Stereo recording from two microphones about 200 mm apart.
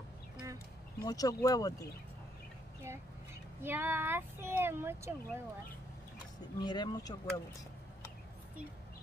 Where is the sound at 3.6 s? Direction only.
10° right (ahead or behind).